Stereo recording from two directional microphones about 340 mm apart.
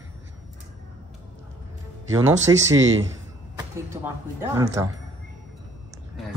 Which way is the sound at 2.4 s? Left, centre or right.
Right.